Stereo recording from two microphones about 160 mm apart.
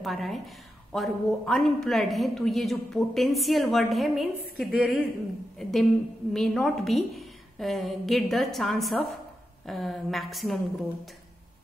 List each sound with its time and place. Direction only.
0.0 s a woman's voice: centre (ahead or behind)